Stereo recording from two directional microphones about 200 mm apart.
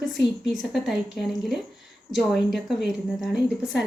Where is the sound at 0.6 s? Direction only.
Centre (ahead or behind).